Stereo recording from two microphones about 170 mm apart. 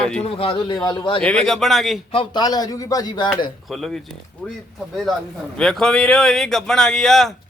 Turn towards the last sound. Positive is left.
turn(degrees=0)  # may be behind; listen again after turning